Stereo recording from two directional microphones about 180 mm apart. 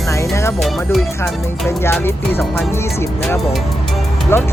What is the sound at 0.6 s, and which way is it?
Speech, centre (ahead or behind).